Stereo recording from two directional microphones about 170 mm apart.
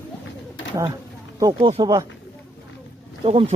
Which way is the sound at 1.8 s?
25° right (ahead or behind).